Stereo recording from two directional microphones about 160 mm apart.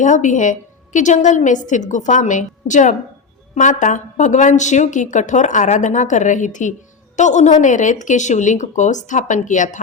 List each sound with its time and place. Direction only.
0.0 s a woman's voice: 50° left (ahead or behind)